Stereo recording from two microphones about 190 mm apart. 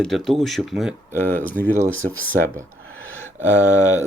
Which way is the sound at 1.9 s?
90° right.